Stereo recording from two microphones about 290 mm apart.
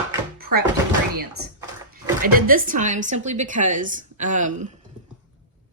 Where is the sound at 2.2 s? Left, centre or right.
Right.